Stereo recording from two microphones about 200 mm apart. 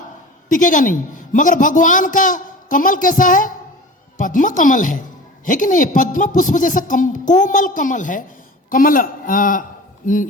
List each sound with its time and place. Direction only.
0.4 s a man's voice: 40° left (ahead or behind)